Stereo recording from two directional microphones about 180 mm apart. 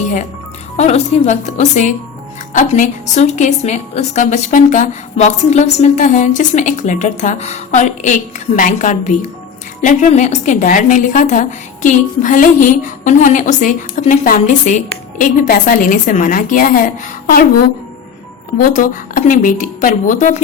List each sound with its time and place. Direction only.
0.8 s a woman's voice: 35° left (ahead or behind)
18.6 s a woman's voice: 50° left (ahead or behind)